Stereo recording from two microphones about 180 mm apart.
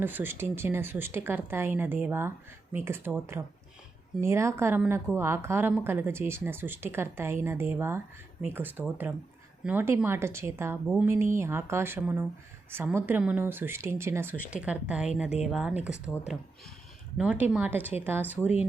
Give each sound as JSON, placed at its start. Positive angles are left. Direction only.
{"t": 0.0, "sound": "speech", "side_deg": -10}
{"t": 17.2, "sound": "speech", "side_deg": -10}